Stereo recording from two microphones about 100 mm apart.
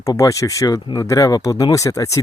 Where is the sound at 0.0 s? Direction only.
35° left (ahead or behind).